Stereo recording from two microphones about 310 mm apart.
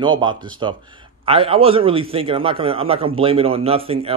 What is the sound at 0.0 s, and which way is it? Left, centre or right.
A man's voice, centre.